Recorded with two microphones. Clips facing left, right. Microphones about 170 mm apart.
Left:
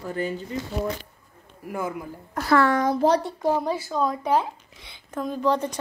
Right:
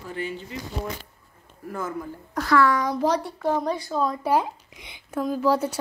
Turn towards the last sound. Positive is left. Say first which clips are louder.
# right 1 dB
turn(degrees=-10)  # may be behind; listen again after turning